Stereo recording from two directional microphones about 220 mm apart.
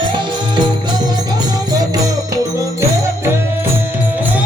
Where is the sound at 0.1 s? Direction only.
20° right (ahead or behind).